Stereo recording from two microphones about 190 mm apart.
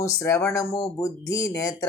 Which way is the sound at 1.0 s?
15° left (ahead or behind).